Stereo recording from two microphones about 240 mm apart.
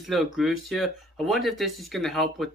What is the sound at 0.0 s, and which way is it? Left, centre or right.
Speech, centre.